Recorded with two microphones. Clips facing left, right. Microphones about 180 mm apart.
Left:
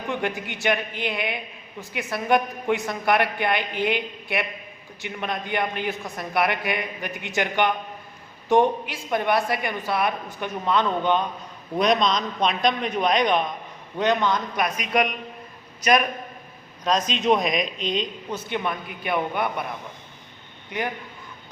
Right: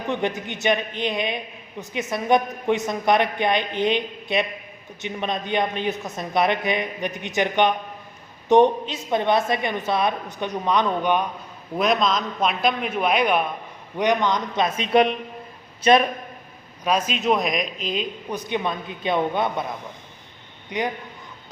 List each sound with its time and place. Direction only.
0.1 s a woman's voice: 20° right (ahead or behind)
11.8 s a man's voice: centre (ahead or behind); by 16.0 s 30° right (ahead or behind)
16.8 s speech: 10° right (ahead or behind)
20.7 s a man's voice: 20° right (ahead or behind)